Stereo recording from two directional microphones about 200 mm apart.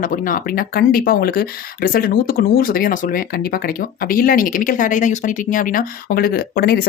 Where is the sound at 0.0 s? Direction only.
40° left (ahead or behind).